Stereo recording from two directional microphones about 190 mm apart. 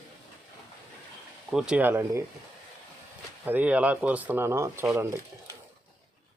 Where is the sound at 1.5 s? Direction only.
5° right (ahead or behind).